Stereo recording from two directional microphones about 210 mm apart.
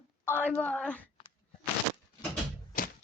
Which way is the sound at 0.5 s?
5° left (ahead or behind).